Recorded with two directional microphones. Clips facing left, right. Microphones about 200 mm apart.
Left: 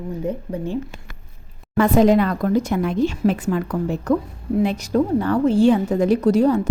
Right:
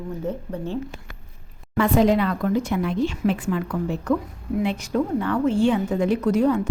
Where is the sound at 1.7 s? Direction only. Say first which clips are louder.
Left 4 dB; 45° left (ahead or behind).